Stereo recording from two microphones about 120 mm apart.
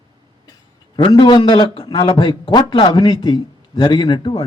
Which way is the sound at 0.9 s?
40° left (ahead or behind).